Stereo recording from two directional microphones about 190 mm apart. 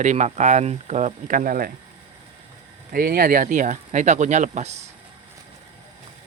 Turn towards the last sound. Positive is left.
turn(degrees=-40)  # may be behind; listen again after turning